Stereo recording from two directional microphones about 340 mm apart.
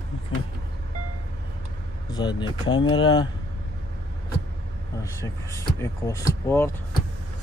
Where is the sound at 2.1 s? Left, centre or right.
Centre.